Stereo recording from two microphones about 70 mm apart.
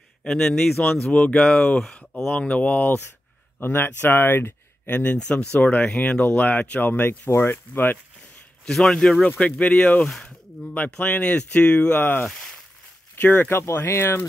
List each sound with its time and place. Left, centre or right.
0.2 s speech: centre; by 4.9 s left
4.9 s speech: centre
8.6 s speech: centre
10.0 s speech: centre
10.9 s speech: centre
12.0 s speech: left